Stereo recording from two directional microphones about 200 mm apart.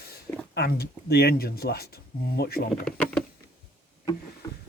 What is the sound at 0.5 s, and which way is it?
Speech, 55° left (ahead or behind).